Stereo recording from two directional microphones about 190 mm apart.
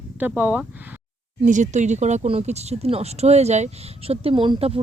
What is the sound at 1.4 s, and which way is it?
Speech, 40° right (ahead or behind).